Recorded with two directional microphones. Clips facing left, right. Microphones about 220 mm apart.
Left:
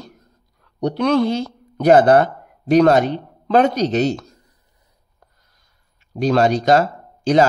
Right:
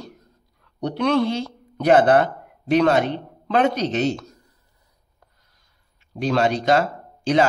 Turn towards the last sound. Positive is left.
turn(degrees=40)  # may be behind; listen again after turning